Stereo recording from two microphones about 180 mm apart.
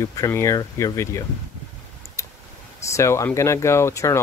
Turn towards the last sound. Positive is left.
turn(degrees=15)  # may be behind; listen again after turning